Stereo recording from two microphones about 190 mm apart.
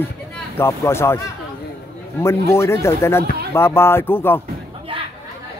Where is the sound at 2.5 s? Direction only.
15° left (ahead or behind).